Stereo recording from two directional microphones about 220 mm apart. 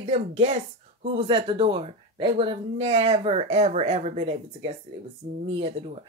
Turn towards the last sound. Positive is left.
turn(degrees=-25)  # may be behind; listen again after turning